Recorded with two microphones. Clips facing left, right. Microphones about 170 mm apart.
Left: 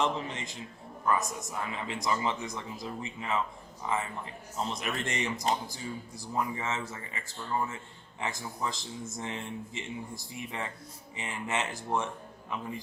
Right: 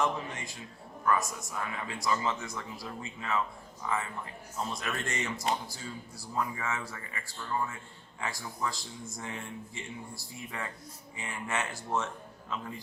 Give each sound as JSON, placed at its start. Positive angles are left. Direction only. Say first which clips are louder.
{"t": 0.0, "sound": "speech", "louder": "left 1 dB", "side_deg": 20}